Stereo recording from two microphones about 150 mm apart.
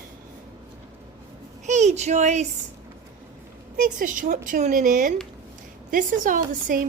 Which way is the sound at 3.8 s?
65° right (ahead or behind).